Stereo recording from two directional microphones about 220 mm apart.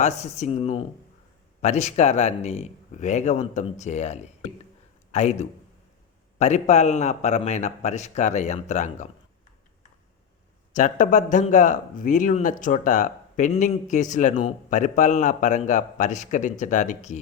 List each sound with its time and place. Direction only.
0.0 s speech: 30° left (ahead or behind)
10.8 s speech: 35° left (ahead or behind)